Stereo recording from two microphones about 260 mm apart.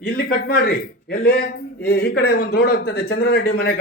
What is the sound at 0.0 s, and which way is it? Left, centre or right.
A man's voice, left.